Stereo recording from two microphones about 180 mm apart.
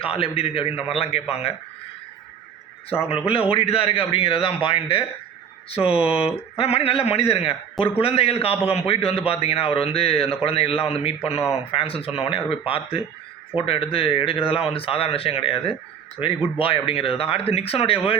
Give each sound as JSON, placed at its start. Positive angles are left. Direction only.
{"t": 0.0, "sound": "a man's voice", "side_deg": 30}
{"t": 3.1, "sound": "a man's voice", "side_deg": 30}